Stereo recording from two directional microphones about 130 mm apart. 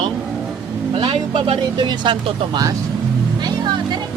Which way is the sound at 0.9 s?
40° right (ahead or behind).